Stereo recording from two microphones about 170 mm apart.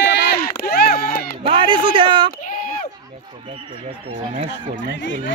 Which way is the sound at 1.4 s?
30° right (ahead or behind).